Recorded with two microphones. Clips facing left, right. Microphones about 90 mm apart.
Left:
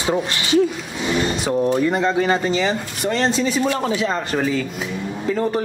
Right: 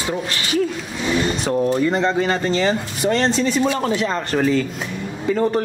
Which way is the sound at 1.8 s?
5° left (ahead or behind).